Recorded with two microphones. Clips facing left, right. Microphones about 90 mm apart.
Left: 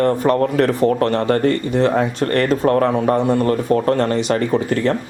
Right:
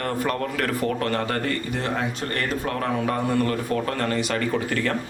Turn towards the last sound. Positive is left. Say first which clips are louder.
# left 7 dB
turn(degrees=25)  # may be behind; listen again after turning